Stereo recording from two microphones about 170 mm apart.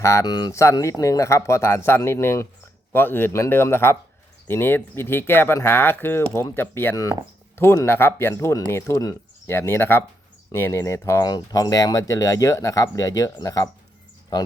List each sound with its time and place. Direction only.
0.0 s speech: 20° left (ahead or behind)